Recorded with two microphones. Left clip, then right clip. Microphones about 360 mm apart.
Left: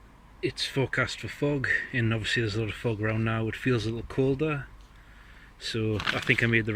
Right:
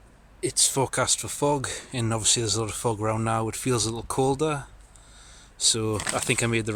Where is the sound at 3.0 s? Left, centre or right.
Right.